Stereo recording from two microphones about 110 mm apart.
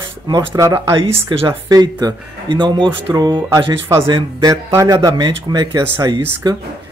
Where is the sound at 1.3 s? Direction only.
45° right (ahead or behind).